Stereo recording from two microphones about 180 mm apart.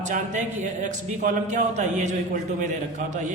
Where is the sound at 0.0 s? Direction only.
45° right (ahead or behind).